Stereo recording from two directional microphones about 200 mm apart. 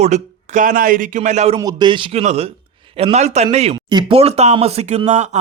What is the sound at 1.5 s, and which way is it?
A man's voice, 20° right (ahead or behind).